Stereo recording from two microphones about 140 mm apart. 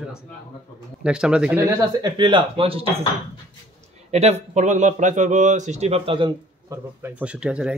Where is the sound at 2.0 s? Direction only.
30° right (ahead or behind).